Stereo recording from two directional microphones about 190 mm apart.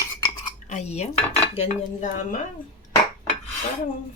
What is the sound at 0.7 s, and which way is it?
Dishes, 35° left (ahead or behind).